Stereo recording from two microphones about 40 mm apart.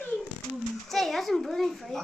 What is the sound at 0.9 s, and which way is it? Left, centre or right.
A child's voice, centre.